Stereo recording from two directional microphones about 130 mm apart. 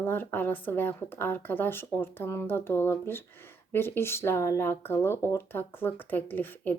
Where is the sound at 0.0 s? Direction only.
15° left (ahead or behind).